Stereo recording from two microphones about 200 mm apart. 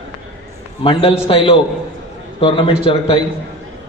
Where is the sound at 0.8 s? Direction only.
25° left (ahead or behind).